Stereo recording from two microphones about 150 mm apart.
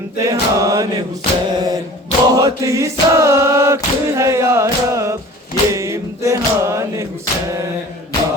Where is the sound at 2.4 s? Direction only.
25° right (ahead or behind).